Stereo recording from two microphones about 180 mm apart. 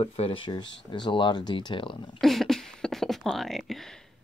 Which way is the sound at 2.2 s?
Centre (ahead or behind).